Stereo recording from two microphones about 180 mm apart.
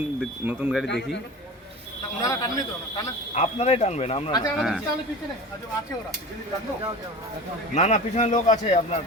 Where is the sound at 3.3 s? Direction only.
35° left (ahead or behind).